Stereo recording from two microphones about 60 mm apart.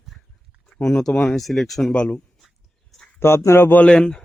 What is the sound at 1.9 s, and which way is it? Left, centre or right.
Speech, centre.